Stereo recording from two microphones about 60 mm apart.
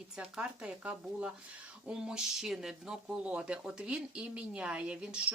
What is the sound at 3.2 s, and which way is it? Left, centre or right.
Speech, centre.